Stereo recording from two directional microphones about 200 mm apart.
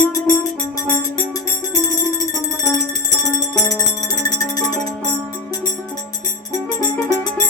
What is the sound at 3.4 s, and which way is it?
Music, 15° left (ahead or behind).